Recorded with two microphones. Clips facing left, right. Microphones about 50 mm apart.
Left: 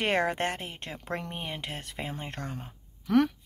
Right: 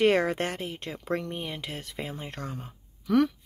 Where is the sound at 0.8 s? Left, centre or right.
Left.